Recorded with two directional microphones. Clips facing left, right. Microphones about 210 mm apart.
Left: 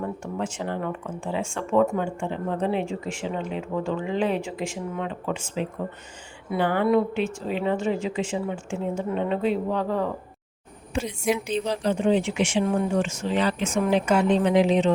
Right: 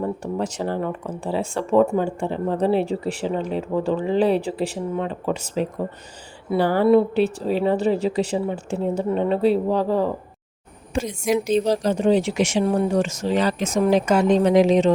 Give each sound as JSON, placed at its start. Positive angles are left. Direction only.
{"t": 0.0, "sound": "speech", "side_deg": -40}
{"t": 10.9, "sound": "speech", "side_deg": -45}